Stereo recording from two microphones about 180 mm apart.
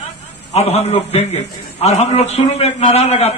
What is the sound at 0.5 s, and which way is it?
A man's voice, 35° left (ahead or behind).